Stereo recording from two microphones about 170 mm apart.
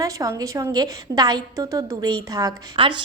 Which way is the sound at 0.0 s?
20° right (ahead or behind).